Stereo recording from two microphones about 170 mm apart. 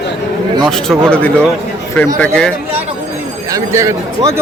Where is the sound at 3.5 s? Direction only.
15° right (ahead or behind).